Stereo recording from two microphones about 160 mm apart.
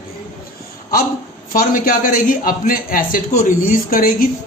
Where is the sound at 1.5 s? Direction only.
60° left (ahead or behind).